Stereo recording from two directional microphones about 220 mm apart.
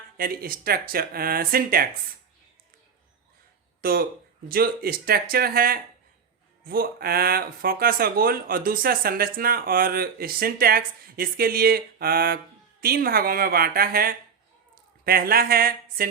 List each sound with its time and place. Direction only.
0.2 s speech: 40° right (ahead or behind)
3.8 s speech: 40° right (ahead or behind)